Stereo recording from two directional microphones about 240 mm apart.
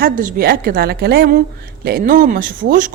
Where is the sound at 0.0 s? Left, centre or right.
Right.